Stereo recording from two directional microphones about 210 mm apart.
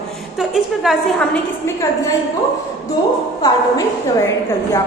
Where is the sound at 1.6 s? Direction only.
15° left (ahead or behind).